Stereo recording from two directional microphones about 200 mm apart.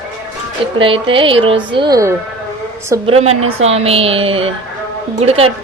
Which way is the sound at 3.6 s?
30° right (ahead or behind).